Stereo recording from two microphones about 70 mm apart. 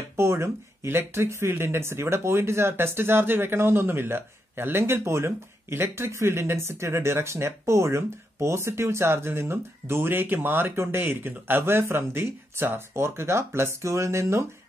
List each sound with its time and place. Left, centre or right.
0.1 s speech: right